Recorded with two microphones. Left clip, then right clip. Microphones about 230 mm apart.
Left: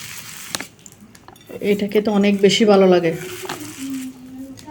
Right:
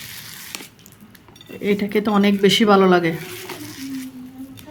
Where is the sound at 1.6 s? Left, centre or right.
Right.